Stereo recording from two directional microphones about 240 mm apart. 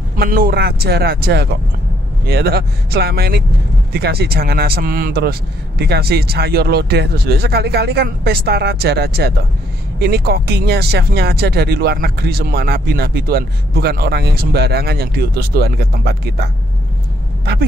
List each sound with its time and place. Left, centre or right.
0.2 s speech: right